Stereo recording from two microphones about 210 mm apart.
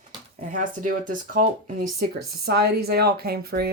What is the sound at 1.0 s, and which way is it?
Speech, 40° right (ahead or behind).